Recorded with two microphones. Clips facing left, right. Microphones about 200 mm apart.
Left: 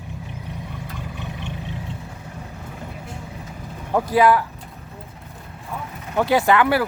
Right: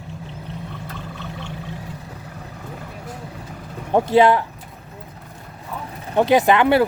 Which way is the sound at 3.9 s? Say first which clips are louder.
Right 2 dB; 25° right (ahead or behind).